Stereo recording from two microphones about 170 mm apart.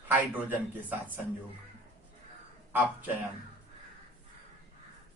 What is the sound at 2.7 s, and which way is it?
Speech, 10° right (ahead or behind).